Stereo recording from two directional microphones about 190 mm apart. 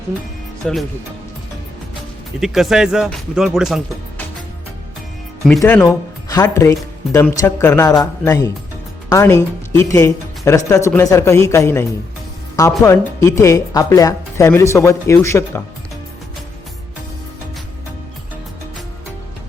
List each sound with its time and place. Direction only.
0.6 s speech: centre (ahead or behind)
2.4 s speech: centre (ahead or behind)
5.5 s speech: 10° left (ahead or behind)